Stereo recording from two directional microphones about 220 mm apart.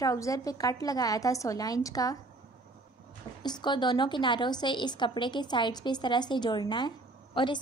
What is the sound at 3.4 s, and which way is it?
A woman's voice, 20° left (ahead or behind).